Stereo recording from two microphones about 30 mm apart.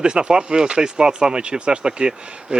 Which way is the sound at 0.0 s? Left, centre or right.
Right.